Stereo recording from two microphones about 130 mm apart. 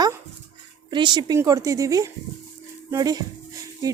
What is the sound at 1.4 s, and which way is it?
A woman's voice, 25° right (ahead or behind).